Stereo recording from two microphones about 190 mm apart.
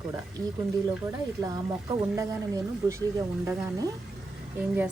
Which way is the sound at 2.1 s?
20° right (ahead or behind).